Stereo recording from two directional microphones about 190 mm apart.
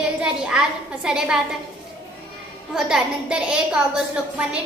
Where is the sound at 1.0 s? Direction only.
5° right (ahead or behind).